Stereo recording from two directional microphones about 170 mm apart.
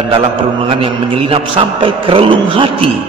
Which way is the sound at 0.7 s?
30° right (ahead or behind).